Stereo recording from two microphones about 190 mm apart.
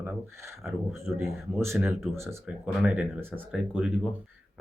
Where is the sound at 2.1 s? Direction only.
15° right (ahead or behind).